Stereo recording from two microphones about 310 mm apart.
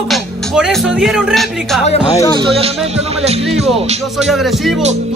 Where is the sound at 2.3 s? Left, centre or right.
Centre.